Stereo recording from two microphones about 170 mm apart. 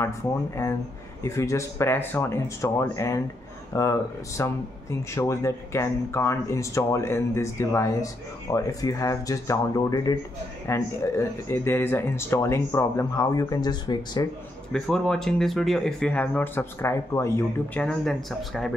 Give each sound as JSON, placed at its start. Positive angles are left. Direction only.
{"t": 0.0, "sound": "speech", "side_deg": 15}
{"t": 14.7, "sound": "speech", "side_deg": 5}
{"t": 17.7, "sound": "speech", "side_deg": 5}